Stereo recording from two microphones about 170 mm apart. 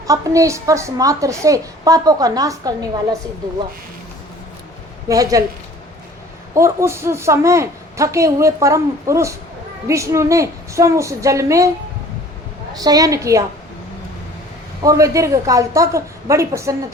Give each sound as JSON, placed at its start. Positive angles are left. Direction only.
{"t": 0.1, "sound": "a woman's voice", "side_deg": -20}
{"t": 5.0, "sound": "a woman's voice", "side_deg": -20}
{"t": 6.5, "sound": "a woman's voice", "side_deg": -15}
{"t": 12.7, "sound": "a woman's voice", "side_deg": -20}
{"t": 14.8, "sound": "a woman's voice", "side_deg": -20}